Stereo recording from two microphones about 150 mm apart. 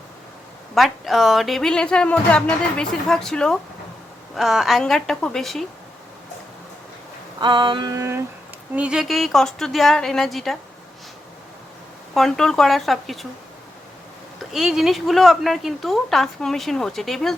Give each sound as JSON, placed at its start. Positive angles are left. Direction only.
{"t": 0.7, "sound": "a woman's voice", "side_deg": 0}
{"t": 7.3, "sound": "female singing", "side_deg": -30}
{"t": 8.7, "sound": "a woman's voice", "side_deg": -5}
{"t": 12.1, "sound": "a woman's voice", "side_deg": 5}
{"t": 14.3, "sound": "a woman's voice", "side_deg": -5}